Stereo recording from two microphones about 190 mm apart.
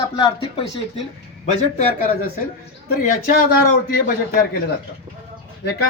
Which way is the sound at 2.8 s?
55° left (ahead or behind).